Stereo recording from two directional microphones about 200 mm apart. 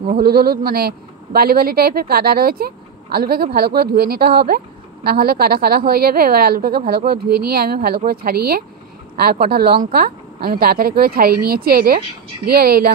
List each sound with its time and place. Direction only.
0.0 s a woman's voice: 45° right (ahead or behind)